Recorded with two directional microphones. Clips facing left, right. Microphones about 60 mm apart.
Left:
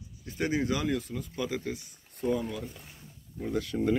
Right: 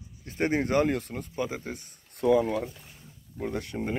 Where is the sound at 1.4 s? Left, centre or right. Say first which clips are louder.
Right 1 dB; right.